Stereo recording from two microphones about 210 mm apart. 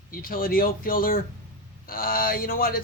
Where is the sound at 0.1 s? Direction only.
45° left (ahead or behind).